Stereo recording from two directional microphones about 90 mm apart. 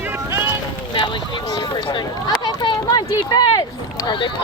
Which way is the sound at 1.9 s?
60° left (ahead or behind).